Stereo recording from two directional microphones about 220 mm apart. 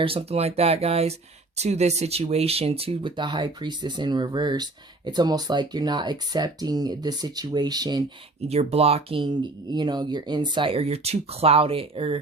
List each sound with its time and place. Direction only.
0.0 s speech: 25° right (ahead or behind)
8.4 s speech: 30° right (ahead or behind)